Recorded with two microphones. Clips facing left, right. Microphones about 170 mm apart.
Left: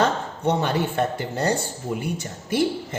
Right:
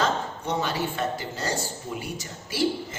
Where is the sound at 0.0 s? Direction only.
60° left (ahead or behind).